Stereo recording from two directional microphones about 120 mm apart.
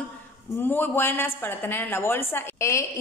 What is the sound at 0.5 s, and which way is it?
A woman's voice, 15° left (ahead or behind).